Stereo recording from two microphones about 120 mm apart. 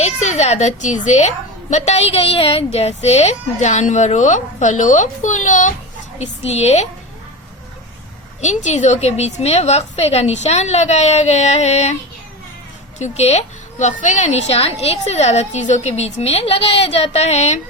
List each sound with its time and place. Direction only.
0.0 s a woman's voice: 70° left (ahead or behind)
1.7 s a woman's voice: 70° left (ahead or behind); by 5.7 s 90° left
6.1 s a woman's voice: 65° left (ahead or behind)
8.4 s a woman's voice: 80° left
13.0 s a woman's voice: 65° left (ahead or behind)